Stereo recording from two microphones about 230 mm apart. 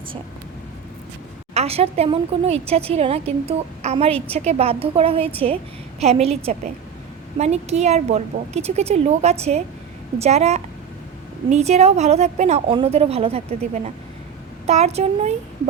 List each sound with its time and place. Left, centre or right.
1.5 s speech: right
14.7 s speech: right